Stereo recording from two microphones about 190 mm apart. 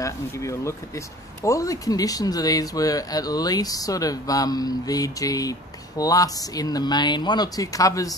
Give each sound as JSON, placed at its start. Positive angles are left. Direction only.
{"t": 0.0, "sound": "speech", "side_deg": 15}